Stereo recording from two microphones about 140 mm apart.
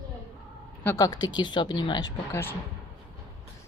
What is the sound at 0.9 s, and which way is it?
Speech, 25° left (ahead or behind).